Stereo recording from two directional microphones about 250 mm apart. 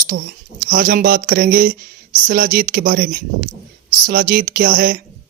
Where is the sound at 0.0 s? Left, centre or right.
Right.